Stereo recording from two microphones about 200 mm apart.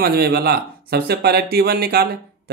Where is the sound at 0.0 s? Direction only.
50° right (ahead or behind).